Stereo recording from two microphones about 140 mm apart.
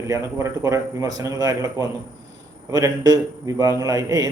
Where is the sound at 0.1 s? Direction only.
20° right (ahead or behind).